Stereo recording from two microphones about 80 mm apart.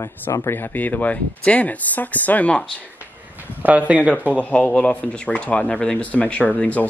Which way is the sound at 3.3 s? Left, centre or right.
Centre.